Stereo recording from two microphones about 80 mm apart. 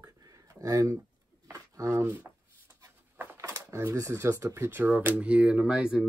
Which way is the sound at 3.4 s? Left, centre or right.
Right.